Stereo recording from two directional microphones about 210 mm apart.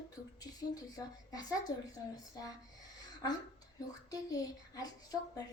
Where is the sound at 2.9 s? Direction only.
15° left (ahead or behind).